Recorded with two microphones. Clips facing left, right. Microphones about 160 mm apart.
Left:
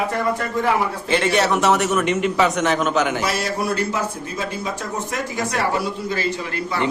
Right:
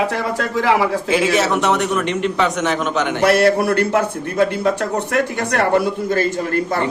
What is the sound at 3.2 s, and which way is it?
A man's voice, 60° right (ahead or behind).